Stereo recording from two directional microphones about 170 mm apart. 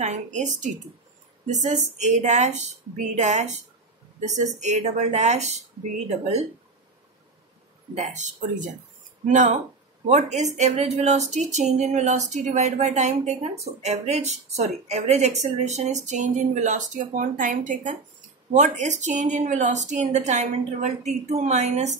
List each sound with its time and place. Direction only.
0.0 s a woman's voice: 45° right (ahead or behind)
4.6 s a woman's voice: 45° right (ahead or behind)
7.9 s a woman's voice: 45° right (ahead or behind)